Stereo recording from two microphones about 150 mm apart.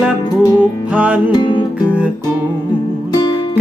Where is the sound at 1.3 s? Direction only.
30° left (ahead or behind).